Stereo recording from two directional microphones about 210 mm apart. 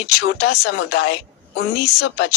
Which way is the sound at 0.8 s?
75° left (ahead or behind).